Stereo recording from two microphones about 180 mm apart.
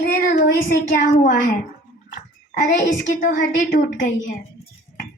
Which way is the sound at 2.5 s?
50° left (ahead or behind).